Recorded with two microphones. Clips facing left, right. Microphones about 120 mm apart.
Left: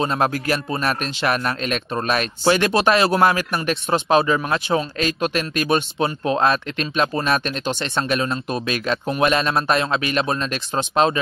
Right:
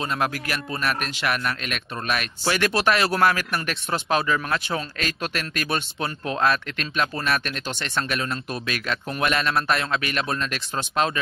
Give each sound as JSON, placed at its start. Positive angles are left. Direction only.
{"t": 0.0, "sound": "speech", "side_deg": 30}